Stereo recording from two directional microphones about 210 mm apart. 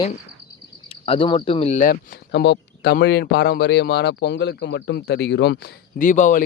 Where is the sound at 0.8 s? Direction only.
25° left (ahead or behind).